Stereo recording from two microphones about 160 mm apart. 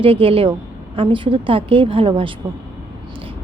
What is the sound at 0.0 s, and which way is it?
Speech, 35° right (ahead or behind).